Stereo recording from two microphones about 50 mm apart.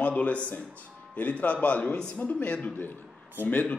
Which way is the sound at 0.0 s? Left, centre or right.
Left.